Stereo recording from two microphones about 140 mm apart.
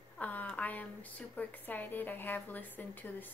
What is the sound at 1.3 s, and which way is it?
A woman's voice, 10° left (ahead or behind).